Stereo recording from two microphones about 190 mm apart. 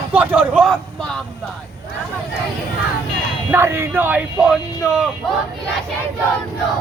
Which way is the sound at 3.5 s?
15° right (ahead or behind).